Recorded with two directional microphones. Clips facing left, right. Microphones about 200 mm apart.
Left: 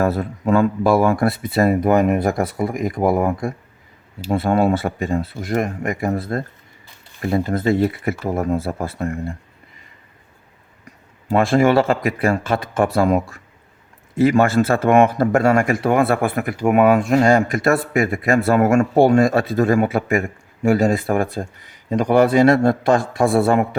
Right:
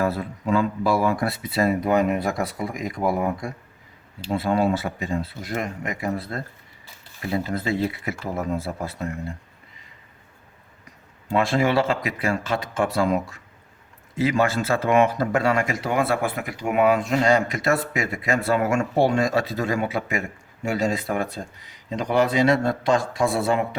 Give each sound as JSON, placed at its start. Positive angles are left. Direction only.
{"t": 0.0, "sound": "speech", "side_deg": 50}
{"t": 11.3, "sound": "speech", "side_deg": 50}